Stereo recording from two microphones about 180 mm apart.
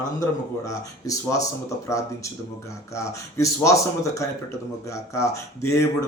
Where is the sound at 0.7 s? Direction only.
20° left (ahead or behind).